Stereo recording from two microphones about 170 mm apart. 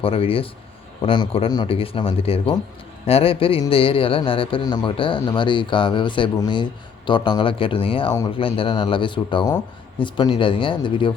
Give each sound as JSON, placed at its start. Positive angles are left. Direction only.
{"t": 0.0, "sound": "a man's voice", "side_deg": 35}